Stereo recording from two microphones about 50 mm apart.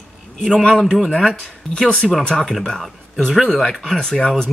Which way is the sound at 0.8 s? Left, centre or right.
Centre.